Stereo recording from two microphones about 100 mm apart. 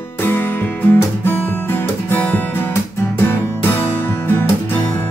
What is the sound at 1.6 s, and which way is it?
Guitar, 20° left (ahead or behind).